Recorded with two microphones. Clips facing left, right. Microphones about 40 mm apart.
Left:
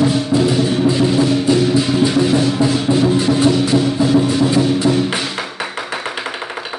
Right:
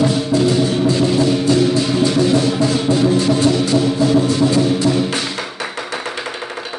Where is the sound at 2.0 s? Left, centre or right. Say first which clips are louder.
Right 2 dB; centre.